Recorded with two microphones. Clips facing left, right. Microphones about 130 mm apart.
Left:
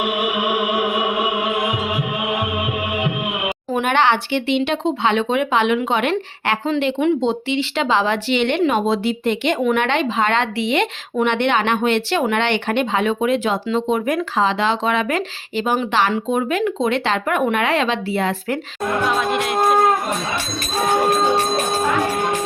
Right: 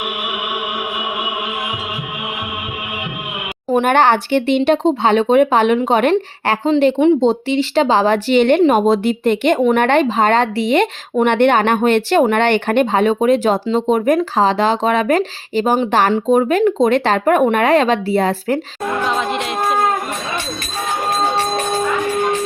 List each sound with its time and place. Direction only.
3.7 s speech: 45° right (ahead or behind)
19.0 s music: 5° left (ahead or behind)